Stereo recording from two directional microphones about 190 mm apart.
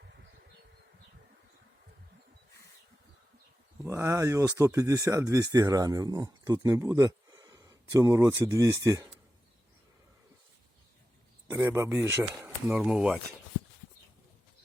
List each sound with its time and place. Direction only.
3.8 s speech: 15° right (ahead or behind)
11.5 s speech: 15° right (ahead or behind)
12.7 s speech: 5° right (ahead or behind)